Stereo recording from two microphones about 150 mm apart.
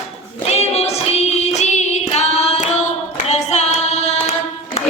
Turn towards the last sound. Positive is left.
turn(degrees=45)  # may be behind; listen again after turning